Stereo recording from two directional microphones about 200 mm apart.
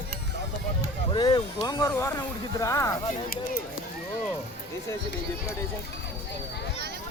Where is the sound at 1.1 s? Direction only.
20° left (ahead or behind).